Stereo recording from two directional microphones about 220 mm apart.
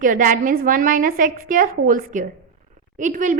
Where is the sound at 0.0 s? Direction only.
35° right (ahead or behind).